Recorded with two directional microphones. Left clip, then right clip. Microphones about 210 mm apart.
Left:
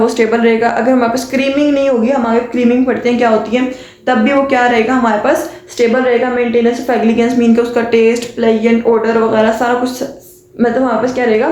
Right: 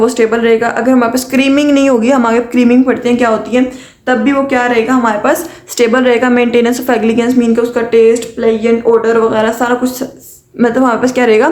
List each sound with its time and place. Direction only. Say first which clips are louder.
0.0 s a woman's voice: right 1 dB; 25° right (ahead or behind)
10.6 s a woman's voice: right 2 dB; 35° right (ahead or behind)